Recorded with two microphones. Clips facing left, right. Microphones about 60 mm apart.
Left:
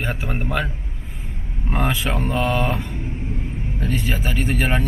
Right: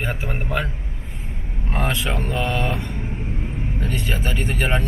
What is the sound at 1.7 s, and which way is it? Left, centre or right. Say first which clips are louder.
Speech: left 1 dB; centre.